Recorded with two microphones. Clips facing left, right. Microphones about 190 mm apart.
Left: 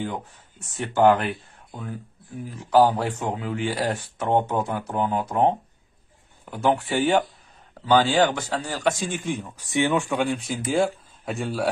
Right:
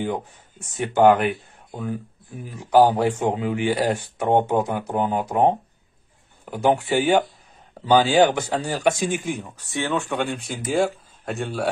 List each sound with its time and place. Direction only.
0.7 s speech: 20° right (ahead or behind)
9.6 s speech: 15° left (ahead or behind)
10.1 s speech: centre (ahead or behind)